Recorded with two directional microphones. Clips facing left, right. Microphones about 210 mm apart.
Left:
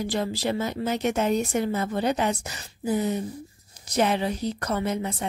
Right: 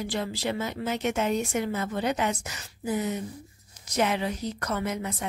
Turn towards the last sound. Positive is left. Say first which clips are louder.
# left 3 dB
turn(degrees=30)  # may be behind; listen again after turning